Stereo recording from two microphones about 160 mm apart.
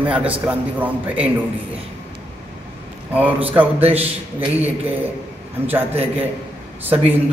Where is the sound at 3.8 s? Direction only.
40° right (ahead or behind).